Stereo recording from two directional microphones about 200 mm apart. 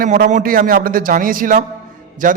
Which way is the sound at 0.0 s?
40° right (ahead or behind).